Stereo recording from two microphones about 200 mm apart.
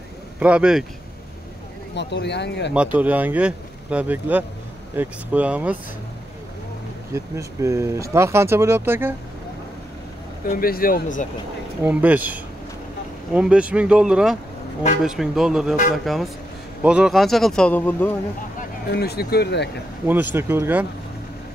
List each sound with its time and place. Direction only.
0.4 s speech: 5° right (ahead or behind)
2.0 s speech: 60° left (ahead or behind)
2.7 s speech: 5° right (ahead or behind)
7.2 s speech: 15° right (ahead or behind)
10.5 s speech: 45° left (ahead or behind)
11.8 s speech: 10° right (ahead or behind); by 18.1 s 10° left (ahead or behind)
18.6 s speech: 55° left (ahead or behind)
20.1 s speech: 10° right (ahead or behind)